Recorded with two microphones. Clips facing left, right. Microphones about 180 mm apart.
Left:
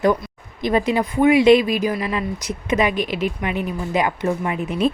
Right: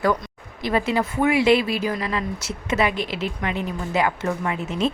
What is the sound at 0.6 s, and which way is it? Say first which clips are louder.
A woman's voice: left 3 dB; 20° left (ahead or behind).